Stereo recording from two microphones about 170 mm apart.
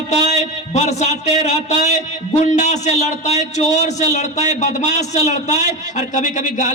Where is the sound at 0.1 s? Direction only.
40° left (ahead or behind).